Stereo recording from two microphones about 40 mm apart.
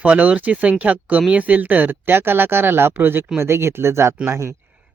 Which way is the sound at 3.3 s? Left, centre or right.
Right.